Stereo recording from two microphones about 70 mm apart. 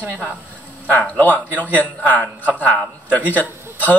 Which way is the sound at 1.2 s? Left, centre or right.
Left.